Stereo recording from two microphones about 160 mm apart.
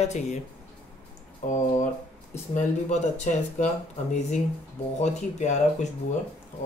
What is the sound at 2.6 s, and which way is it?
Speech, 50° left (ahead or behind).